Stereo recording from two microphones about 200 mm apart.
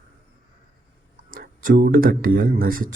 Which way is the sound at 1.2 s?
45° right (ahead or behind).